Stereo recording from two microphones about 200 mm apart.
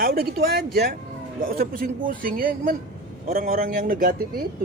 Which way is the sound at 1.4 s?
45° right (ahead or behind).